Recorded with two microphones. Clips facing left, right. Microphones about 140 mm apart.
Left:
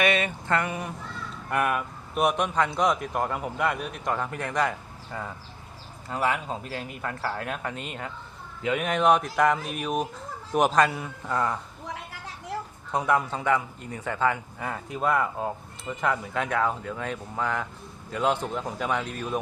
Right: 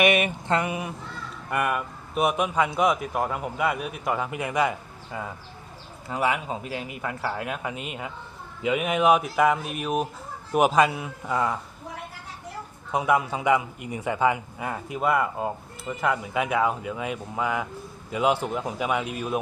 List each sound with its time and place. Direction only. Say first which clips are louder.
0.0 s a man's voice: right 3 dB; 15° right (ahead or behind)
12.9 s a man's voice: right 2 dB; 10° right (ahead or behind)